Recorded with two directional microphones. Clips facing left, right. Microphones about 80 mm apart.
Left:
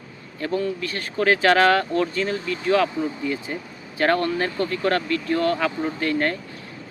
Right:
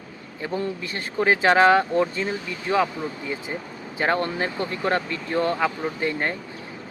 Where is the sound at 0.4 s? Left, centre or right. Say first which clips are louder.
Left 3 dB; right.